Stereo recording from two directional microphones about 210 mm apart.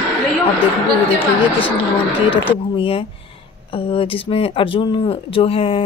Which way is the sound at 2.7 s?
25° left (ahead or behind).